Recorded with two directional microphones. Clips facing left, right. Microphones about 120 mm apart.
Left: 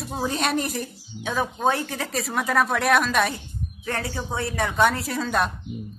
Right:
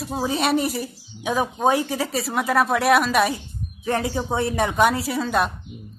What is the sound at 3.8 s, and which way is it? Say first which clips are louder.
A woman's voice: right 6 dB; 20° right (ahead or behind).